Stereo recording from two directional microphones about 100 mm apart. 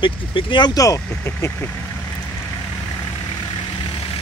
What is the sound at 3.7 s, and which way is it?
Vehicle, 55° left (ahead or behind).